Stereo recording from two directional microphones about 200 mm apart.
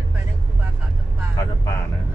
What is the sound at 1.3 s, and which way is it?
Speech, 15° left (ahead or behind).